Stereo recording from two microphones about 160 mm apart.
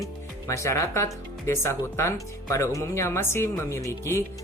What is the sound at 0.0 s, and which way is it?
Speech, 20° left (ahead or behind).